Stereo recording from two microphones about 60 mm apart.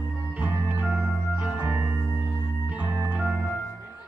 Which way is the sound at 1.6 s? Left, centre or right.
Right.